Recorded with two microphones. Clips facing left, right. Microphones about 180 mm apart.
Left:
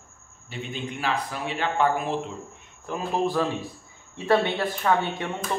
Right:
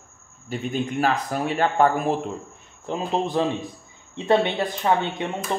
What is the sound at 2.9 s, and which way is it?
Speech, 20° right (ahead or behind).